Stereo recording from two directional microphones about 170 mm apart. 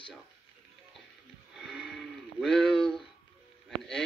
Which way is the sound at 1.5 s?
Centre (ahead or behind).